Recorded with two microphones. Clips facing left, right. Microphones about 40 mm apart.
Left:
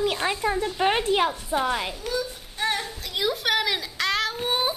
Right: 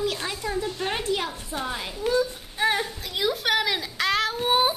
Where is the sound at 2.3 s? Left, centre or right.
Centre.